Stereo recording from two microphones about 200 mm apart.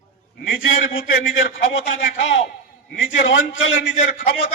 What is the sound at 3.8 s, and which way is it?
Speech, 45° left (ahead or behind).